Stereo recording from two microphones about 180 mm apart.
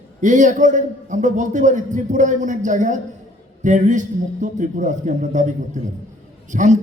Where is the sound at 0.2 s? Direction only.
45° right (ahead or behind).